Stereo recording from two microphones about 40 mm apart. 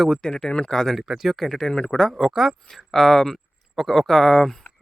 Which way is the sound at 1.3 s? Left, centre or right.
Centre.